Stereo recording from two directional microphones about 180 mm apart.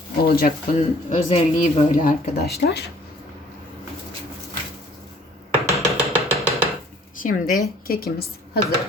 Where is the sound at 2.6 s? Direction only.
65° left (ahead or behind).